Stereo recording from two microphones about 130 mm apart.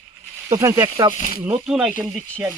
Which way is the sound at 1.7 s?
5° right (ahead or behind).